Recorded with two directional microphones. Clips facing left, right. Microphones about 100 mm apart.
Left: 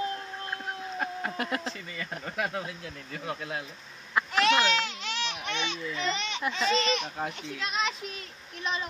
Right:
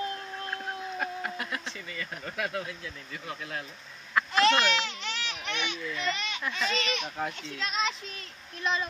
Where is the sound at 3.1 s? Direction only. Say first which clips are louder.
Left 5 dB; 35° left (ahead or behind).